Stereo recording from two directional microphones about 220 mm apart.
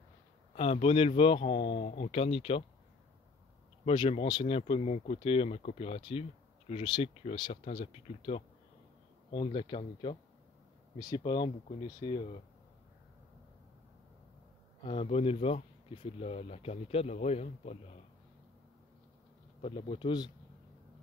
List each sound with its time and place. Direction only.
0.6 s speech: 25° left (ahead or behind)
3.8 s speech: 25° left (ahead or behind)
14.9 s speech: 25° left (ahead or behind)
19.6 s speech: 20° left (ahead or behind)